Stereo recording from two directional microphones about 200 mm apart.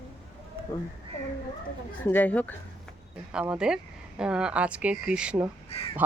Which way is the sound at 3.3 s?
5° right (ahead or behind).